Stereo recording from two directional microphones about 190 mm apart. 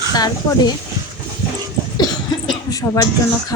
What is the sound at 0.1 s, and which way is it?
Speech, 20° left (ahead or behind).